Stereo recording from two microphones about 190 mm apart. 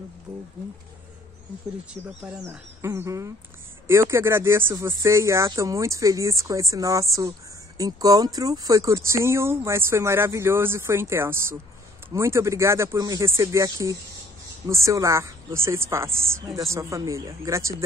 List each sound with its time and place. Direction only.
2.2 s speech: 5° right (ahead or behind)